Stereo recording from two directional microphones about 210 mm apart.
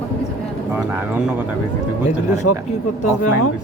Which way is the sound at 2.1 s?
35° left (ahead or behind).